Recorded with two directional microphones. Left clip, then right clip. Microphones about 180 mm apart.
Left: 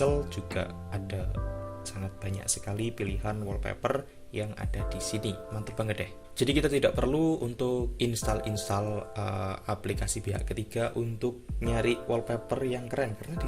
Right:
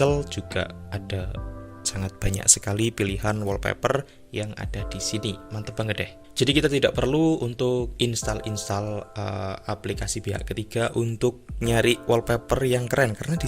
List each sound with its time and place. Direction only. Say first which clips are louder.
0.0 s speech: right 5 dB; 40° right (ahead or behind)
1.8 s speech: right 9 dB; 45° right (ahead or behind)
4.4 s speech: right 4 dB; 30° right (ahead or behind)
11.2 s speech: right 8 dB; 50° right (ahead or behind)